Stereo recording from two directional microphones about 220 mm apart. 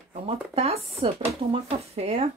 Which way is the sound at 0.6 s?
30° right (ahead or behind).